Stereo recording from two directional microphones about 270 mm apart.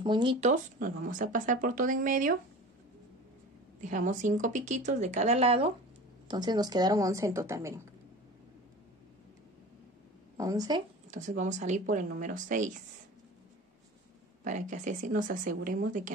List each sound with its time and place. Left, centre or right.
0.0 s speech: centre
3.8 s speech: right; by 7.8 s centre
10.3 s a woman's voice: centre
11.1 s speech: right
14.4 s speech: right